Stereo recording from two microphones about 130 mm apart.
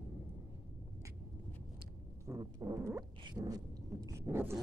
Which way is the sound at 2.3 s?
25° right (ahead or behind).